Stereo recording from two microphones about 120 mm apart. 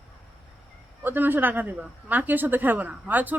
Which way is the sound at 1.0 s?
15° right (ahead or behind).